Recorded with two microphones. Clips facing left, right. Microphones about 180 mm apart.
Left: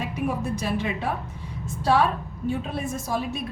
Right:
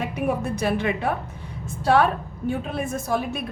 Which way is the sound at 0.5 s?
60° right (ahead or behind).